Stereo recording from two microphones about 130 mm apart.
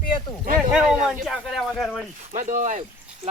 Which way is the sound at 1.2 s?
Centre (ahead or behind).